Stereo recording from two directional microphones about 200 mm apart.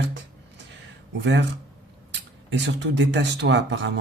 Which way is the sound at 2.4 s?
60° right (ahead or behind).